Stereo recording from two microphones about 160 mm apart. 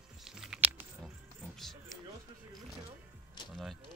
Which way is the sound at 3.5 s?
Centre (ahead or behind).